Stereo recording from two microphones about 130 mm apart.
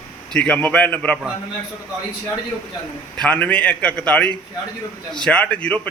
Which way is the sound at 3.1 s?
10° left (ahead or behind).